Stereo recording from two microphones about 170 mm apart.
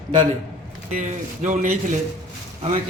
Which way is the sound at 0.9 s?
50° right (ahead or behind).